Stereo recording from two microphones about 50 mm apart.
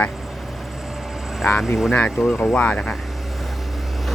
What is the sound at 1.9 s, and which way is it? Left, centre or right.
Speech, left.